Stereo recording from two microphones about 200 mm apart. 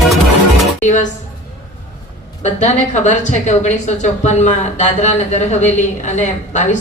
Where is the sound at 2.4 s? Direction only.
35° left (ahead or behind).